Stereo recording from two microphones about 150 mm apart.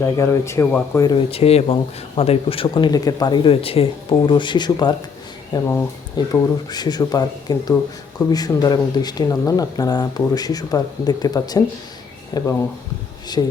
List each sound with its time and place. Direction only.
0.0 s speech: 20° left (ahead or behind)
1.0 s speech: 35° left (ahead or behind)
5.5 s speech: 15° left (ahead or behind)
6.2 s speech: 30° left (ahead or behind)